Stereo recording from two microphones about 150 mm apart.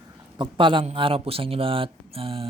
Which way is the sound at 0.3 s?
35° right (ahead or behind).